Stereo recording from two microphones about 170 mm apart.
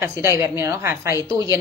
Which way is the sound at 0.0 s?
15° right (ahead or behind).